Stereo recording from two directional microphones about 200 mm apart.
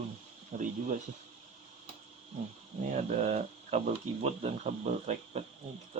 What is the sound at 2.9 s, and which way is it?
Speech, 35° right (ahead or behind).